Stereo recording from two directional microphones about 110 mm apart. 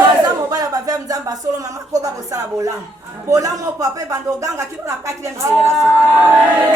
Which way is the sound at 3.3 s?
30° right (ahead or behind).